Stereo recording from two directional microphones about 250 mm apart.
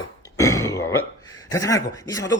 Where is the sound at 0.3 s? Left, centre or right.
Centre.